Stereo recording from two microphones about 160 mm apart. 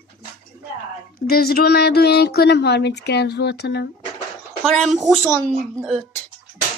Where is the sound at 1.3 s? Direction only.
70° left (ahead or behind); by 3.9 s 90° left.